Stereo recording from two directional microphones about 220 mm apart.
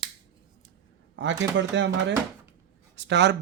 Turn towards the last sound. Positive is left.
turn(degrees=-50)  # may be behind; listen again after turning